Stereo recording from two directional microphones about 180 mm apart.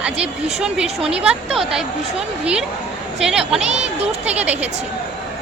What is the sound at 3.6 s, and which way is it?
Speech, 40° right (ahead or behind).